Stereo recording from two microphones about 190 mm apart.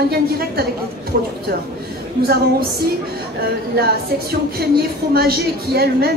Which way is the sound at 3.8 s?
55° right (ahead or behind).